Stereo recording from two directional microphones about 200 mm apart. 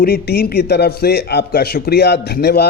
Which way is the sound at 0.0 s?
50° left (ahead or behind).